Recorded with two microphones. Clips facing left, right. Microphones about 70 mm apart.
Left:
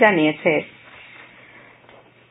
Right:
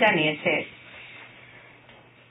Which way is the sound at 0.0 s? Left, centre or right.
Left.